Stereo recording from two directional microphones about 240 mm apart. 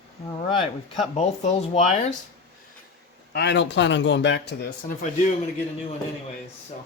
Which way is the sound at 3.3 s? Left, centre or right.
Left.